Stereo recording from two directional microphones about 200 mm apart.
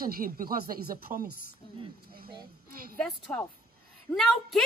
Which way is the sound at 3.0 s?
5° left (ahead or behind).